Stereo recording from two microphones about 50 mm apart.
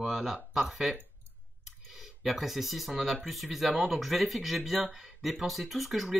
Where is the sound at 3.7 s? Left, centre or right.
Right.